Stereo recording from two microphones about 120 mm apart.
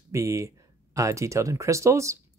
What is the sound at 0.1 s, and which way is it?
Speech, 25° right (ahead or behind).